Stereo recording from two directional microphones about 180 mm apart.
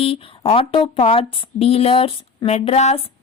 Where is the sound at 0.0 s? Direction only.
30° left (ahead or behind).